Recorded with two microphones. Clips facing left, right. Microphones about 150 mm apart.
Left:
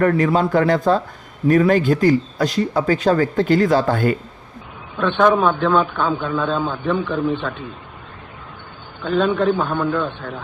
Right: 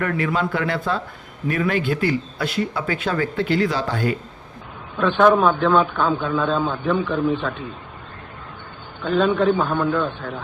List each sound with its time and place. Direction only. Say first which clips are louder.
0.0 s speech: left 6 dB; 35° left (ahead or behind)
4.9 s a man's voice: even; centre (ahead or behind)
9.0 s a man's voice: even; centre (ahead or behind)